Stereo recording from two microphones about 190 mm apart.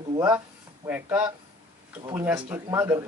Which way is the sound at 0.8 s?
10° right (ahead or behind).